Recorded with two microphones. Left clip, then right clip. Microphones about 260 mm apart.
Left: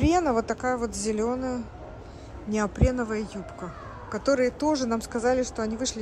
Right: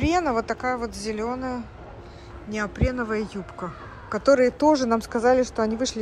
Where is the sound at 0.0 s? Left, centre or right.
Centre.